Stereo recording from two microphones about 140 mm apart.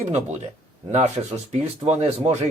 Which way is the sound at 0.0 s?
55° right (ahead or behind).